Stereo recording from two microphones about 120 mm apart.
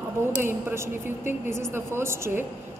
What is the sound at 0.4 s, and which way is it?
A woman's voice, 20° right (ahead or behind).